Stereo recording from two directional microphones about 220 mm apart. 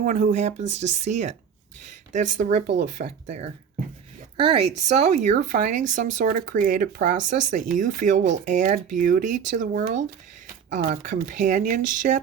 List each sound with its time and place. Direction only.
0.0 s speech: 35° right (ahead or behind)